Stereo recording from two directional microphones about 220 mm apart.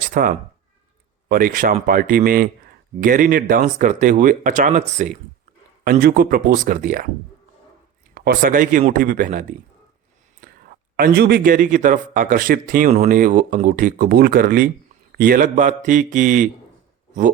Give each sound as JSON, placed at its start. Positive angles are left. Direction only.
{"t": 0.1, "sound": "a man's voice", "side_deg": -40}
{"t": 5.8, "sound": "a man's voice", "side_deg": -45}
{"t": 8.1, "sound": "a man's voice", "side_deg": -45}
{"t": 10.9, "sound": "a man's voice", "side_deg": -45}